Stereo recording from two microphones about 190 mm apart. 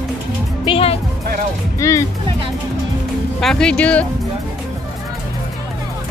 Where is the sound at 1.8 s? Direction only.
15° left (ahead or behind).